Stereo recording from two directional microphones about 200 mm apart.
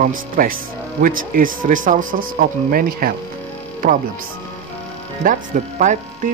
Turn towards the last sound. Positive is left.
turn(degrees=-40)  # may be behind; listen again after turning